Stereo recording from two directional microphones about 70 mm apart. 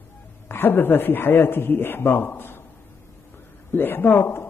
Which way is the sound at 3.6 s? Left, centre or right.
Left.